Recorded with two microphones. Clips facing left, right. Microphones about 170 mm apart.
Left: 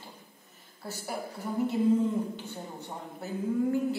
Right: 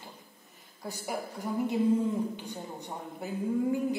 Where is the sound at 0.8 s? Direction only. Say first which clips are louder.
Right 1 dB; 15° right (ahead or behind).